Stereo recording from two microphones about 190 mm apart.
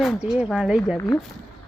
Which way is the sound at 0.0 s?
Centre (ahead or behind).